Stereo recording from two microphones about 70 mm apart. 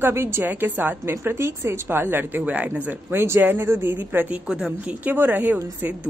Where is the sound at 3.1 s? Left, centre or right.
Right.